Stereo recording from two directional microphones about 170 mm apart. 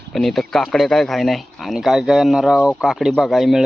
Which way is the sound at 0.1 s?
Centre (ahead or behind).